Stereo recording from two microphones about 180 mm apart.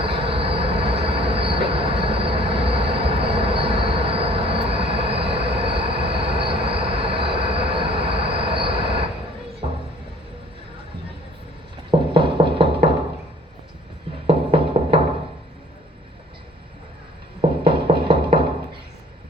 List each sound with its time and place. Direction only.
0.0 s train: 30° right (ahead or behind)
11.9 s music: 30° right (ahead or behind)
14.3 s music: 30° right (ahead or behind)
17.6 s music: 30° right (ahead or behind)